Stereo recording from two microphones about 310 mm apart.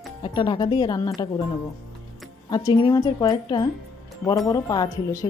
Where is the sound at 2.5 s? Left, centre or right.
Centre.